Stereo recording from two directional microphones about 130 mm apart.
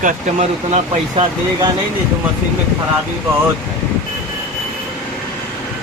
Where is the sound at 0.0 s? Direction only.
70° right (ahead or behind).